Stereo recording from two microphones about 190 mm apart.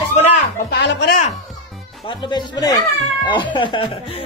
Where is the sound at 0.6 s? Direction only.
55° left (ahead or behind).